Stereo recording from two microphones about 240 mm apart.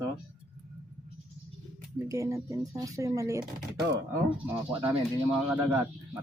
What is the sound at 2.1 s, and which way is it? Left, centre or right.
Speech, centre.